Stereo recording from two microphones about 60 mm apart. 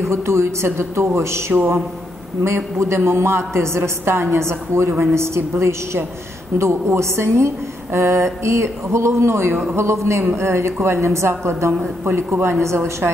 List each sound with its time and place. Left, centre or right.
0.0 s a woman's voice: right